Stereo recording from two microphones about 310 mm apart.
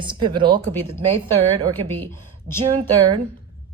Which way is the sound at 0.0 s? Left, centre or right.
Centre.